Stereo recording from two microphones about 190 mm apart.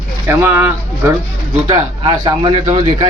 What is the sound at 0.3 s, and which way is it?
Speech, 10° right (ahead or behind).